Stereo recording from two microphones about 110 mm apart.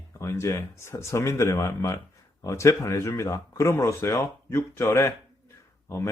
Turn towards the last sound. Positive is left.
turn(degrees=20)  # may be behind; listen again after turning